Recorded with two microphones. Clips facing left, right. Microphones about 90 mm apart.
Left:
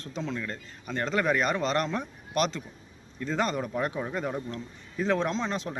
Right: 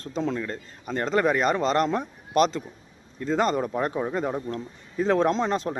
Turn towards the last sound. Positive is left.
turn(degrees=-40)  # may be behind; listen again after turning